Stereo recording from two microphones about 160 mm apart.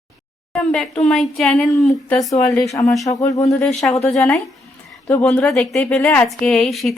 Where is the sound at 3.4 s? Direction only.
Centre (ahead or behind).